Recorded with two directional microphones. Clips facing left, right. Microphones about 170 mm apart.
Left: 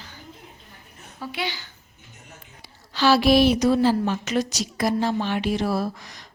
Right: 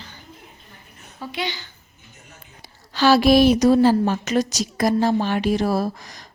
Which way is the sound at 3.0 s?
45° right (ahead or behind).